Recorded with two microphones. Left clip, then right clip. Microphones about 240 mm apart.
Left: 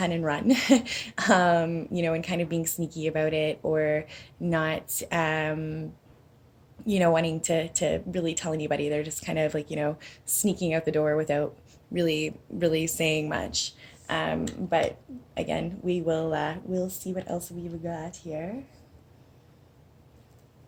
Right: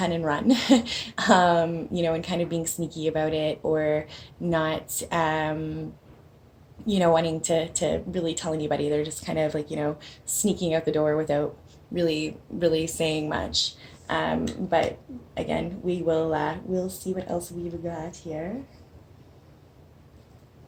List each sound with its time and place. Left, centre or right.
0.0 s speech: left
6.8 s speech: left
12.5 s speech: left
15.4 s speech: left